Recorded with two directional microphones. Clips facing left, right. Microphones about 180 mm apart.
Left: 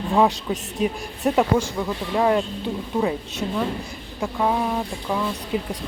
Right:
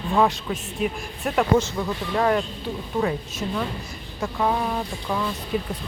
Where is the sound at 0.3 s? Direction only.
35° left (ahead or behind).